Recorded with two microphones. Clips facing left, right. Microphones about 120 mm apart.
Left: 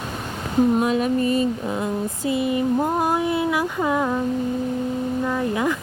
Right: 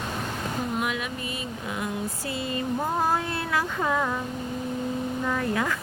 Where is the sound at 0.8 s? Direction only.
35° left (ahead or behind); by 4.2 s 15° left (ahead or behind).